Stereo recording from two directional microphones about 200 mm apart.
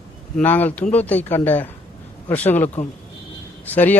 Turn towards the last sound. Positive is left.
turn(degrees=10)  # may be behind; listen again after turning